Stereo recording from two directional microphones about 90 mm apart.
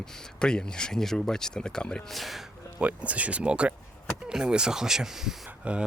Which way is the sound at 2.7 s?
15° right (ahead or behind).